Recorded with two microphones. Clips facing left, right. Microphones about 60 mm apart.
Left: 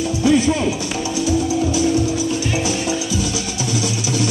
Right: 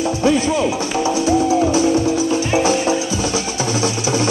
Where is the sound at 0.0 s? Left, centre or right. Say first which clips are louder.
Even; right.